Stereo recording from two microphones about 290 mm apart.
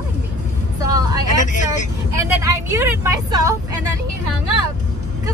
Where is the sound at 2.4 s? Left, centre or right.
Centre.